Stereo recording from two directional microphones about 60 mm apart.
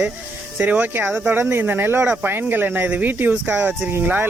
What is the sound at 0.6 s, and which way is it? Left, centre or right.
Speech, right.